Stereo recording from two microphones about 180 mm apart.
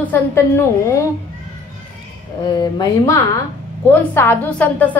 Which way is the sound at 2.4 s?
25° left (ahead or behind).